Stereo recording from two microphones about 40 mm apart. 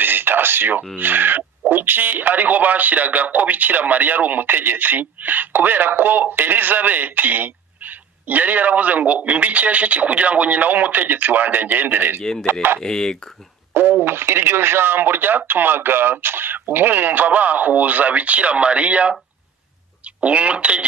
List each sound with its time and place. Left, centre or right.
0.0 s a sound: right
0.9 s speech: right
12.8 s speech: centre
14.0 s speech: right
20.2 s speech: right